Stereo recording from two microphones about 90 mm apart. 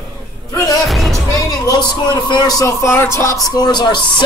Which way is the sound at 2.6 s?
35° left (ahead or behind).